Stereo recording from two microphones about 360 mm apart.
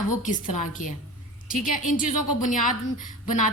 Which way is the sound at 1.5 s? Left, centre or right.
Left.